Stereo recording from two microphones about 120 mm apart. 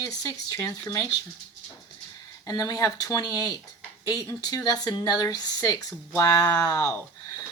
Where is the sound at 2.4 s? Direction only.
30° left (ahead or behind).